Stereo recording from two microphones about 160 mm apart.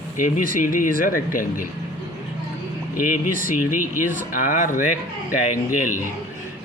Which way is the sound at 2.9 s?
60° left (ahead or behind).